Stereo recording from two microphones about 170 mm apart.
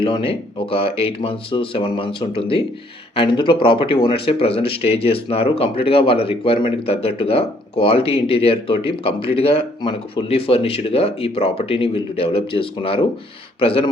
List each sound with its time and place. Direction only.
0.0 s speech: 30° left (ahead or behind)